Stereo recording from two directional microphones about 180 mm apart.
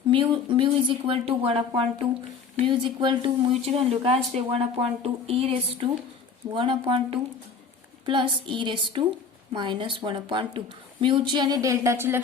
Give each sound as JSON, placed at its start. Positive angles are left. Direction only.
{"t": 0.1, "sound": "a woman's voice", "side_deg": -25}